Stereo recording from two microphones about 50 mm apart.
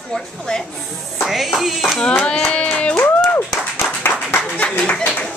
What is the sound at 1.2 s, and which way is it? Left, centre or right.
Speech, centre.